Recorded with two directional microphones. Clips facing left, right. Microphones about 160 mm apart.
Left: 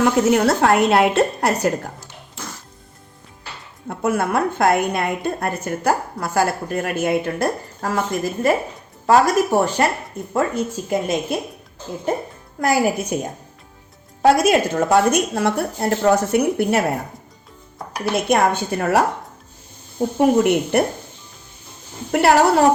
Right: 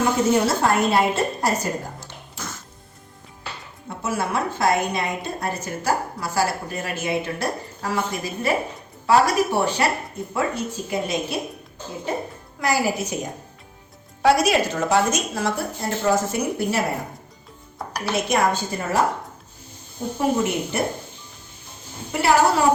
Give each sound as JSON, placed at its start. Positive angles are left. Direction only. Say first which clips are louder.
{"t": 0.3, "sound": "a woman's voice", "louder": "left 4 dB", "side_deg": 65}
{"t": 3.8, "sound": "a woman's voice", "louder": "left 5 dB", "side_deg": 55}
{"t": 12.5, "sound": "speech", "louder": "left 4 dB", "side_deg": 50}
{"t": 14.2, "sound": "a woman's voice", "louder": "left 3 dB", "side_deg": 50}
{"t": 18.3, "sound": "a woman's voice", "louder": "left 4 dB", "side_deg": 60}
{"t": 20.1, "sound": "a woman's voice", "louder": "left 6 dB", "side_deg": 65}
{"t": 22.1, "sound": "a woman's voice", "louder": "left 4 dB", "side_deg": 65}